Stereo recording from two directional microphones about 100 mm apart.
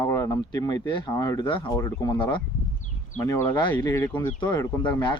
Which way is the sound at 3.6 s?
50° left (ahead or behind).